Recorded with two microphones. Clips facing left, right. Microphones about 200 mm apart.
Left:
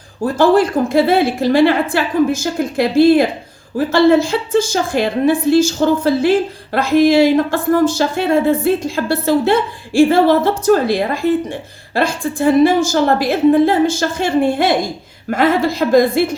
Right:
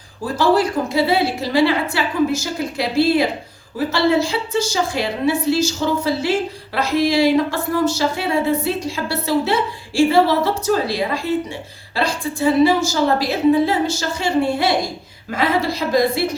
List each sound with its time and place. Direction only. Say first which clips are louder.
0.3 s speech: left 4 dB; 50° left (ahead or behind)